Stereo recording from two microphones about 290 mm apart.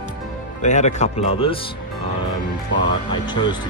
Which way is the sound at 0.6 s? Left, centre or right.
Left.